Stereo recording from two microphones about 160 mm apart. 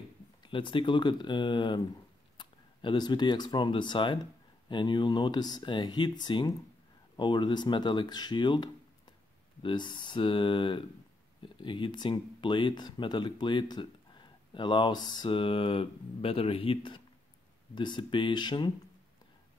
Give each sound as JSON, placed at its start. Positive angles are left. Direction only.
{"t": 0.4, "sound": "speech", "side_deg": 30}